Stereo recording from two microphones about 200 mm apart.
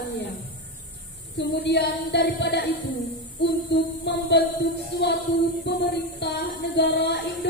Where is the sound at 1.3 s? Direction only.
55° left (ahead or behind).